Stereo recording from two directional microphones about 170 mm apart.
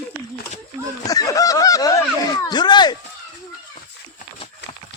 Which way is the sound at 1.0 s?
20° left (ahead or behind).